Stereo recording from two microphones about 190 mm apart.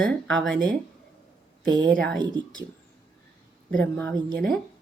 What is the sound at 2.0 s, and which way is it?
Speech, 5° left (ahead or behind).